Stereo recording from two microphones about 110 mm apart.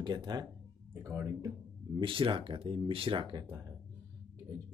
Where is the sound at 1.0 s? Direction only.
25° right (ahead or behind).